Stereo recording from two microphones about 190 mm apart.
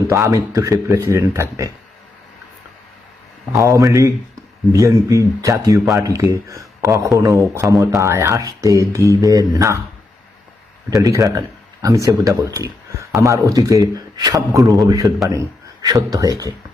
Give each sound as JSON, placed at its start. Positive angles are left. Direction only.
{"t": 0.1, "sound": "speech", "side_deg": -15}
{"t": 3.6, "sound": "speech", "side_deg": -15}
{"t": 11.0, "sound": "speech", "side_deg": -20}